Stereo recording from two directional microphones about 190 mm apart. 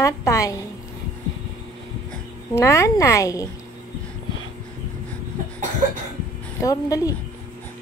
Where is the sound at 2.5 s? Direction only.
15° left (ahead or behind).